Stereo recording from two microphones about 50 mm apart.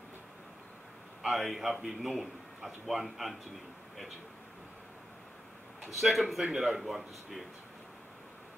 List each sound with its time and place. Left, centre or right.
1.2 s a man's voice: centre
5.8 s a man's voice: centre